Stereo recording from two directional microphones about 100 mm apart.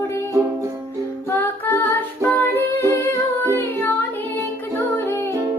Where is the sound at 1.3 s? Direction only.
20° left (ahead or behind).